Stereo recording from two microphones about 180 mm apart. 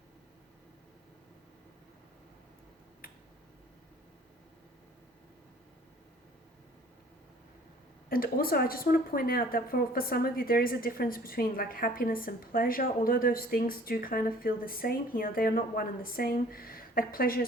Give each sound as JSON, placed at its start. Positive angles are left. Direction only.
{"t": 8.1, "sound": "a woman's voice", "side_deg": 55}